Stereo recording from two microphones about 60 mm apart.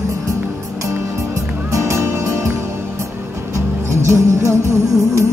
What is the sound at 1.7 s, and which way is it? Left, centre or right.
Music, right.